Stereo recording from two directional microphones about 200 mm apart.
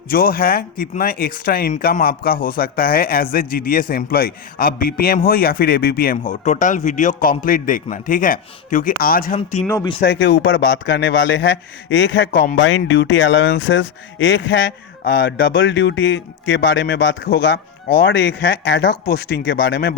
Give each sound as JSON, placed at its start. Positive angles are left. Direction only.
{"t": 0.1, "sound": "a man's voice", "side_deg": 45}
{"t": 9.6, "sound": "speech", "side_deg": 15}
{"t": 10.0, "sound": "speech", "side_deg": 60}